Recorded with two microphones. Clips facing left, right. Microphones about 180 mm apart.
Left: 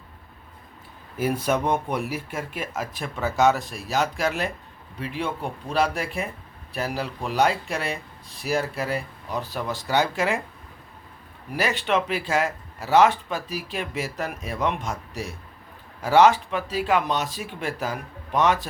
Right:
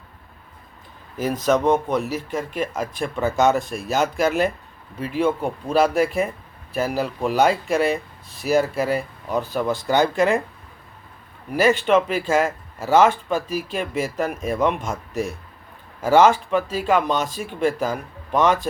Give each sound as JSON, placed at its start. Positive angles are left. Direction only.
{"t": 1.2, "sound": "speech", "side_deg": 10}
{"t": 11.5, "sound": "speech", "side_deg": 0}